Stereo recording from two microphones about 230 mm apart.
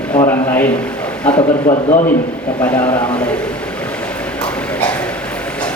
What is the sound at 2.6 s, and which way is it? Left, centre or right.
Speech, centre.